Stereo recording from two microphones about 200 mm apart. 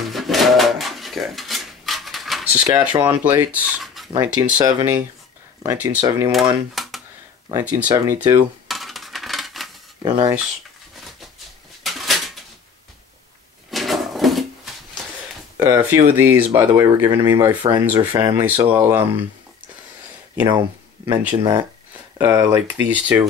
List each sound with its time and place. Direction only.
0.1 s dishes: centre (ahead or behind)
4.1 s speech: 20° right (ahead or behind)
6.0 s speech: 15° right (ahead or behind)
6.7 s computer keyboard: centre (ahead or behind)
7.9 s speech: 20° right (ahead or behind)
8.6 s a sound: centre (ahead or behind)
10.0 s speech: 20° right (ahead or behind)
11.8 s a sound: centre (ahead or behind)
13.7 s a sound: centre (ahead or behind)
15.6 s speech: 15° right (ahead or behind)
20.4 s speech: 20° right (ahead or behind)